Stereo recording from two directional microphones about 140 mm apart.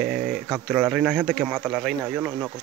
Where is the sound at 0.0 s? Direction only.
Centre (ahead or behind).